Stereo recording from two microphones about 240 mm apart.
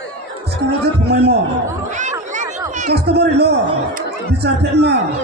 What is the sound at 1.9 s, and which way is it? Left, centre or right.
Chatter, right.